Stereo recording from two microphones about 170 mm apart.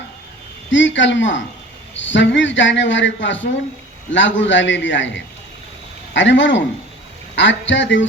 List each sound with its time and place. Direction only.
0.7 s a man's voice: 90° left